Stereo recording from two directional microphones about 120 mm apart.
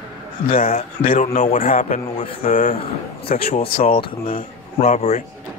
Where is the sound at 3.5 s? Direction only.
55° left (ahead or behind).